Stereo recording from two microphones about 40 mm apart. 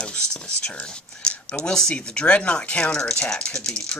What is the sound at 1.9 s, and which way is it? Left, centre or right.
Speech, left.